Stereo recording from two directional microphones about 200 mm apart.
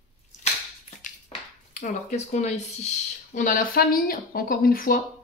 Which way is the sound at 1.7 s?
35° left (ahead or behind).